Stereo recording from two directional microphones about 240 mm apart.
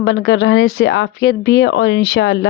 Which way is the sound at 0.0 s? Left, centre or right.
Left.